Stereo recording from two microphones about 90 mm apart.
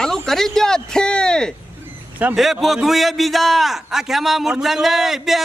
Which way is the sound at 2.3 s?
Centre (ahead or behind).